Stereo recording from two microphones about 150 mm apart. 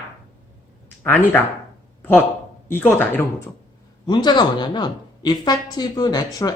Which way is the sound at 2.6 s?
15° left (ahead or behind).